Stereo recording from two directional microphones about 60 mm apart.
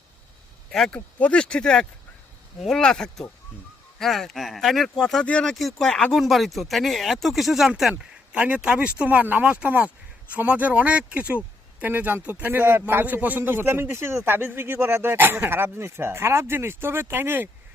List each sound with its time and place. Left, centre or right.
0.7 s speech: centre
0.9 s speech: left
5.2 s speech: centre
6.1 s speech: centre
8.3 s speech: centre; by 17.5 s right